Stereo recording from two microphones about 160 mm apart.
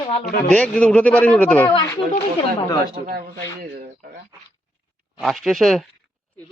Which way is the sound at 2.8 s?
70° right (ahead or behind).